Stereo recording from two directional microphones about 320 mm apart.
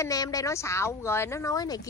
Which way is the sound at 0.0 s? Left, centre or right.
Centre.